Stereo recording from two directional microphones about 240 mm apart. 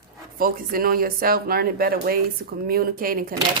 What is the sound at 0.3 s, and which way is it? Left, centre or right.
Speech, right.